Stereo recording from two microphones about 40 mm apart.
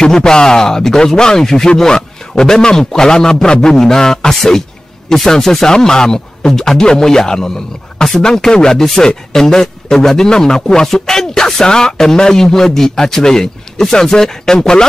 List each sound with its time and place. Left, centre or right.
0.0 s a man's voice: centre